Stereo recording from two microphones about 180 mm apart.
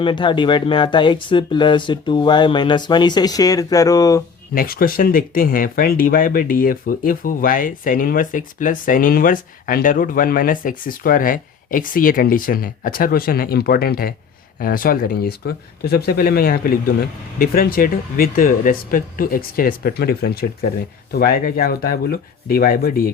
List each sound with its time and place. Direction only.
0.0 s speech: 25° left (ahead or behind)
4.5 s speech: 55° left (ahead or behind)